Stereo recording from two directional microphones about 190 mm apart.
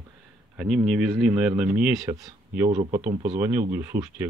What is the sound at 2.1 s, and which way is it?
Speech, 15° right (ahead or behind).